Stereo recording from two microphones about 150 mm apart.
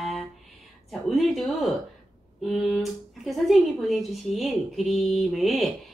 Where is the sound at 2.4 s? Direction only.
Centre (ahead or behind).